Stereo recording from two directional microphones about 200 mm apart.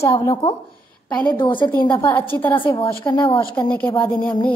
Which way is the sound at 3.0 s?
20° left (ahead or behind).